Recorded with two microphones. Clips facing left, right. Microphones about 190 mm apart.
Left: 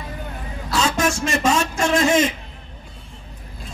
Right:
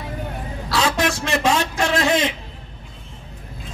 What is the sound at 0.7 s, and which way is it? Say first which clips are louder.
A man's voice: even; 65° right (ahead or behind).